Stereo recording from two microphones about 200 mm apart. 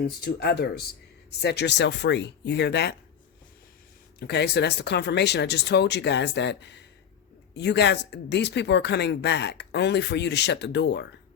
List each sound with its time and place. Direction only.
0.3 s speech: 55° left (ahead or behind)
4.2 s speech: 55° left (ahead or behind)